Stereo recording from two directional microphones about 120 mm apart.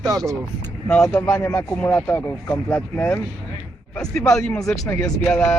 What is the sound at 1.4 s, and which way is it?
Speech, 20° left (ahead or behind).